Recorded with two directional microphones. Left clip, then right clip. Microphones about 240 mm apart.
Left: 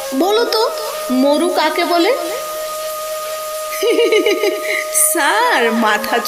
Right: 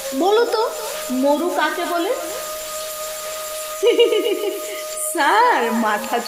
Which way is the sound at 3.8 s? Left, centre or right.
Centre.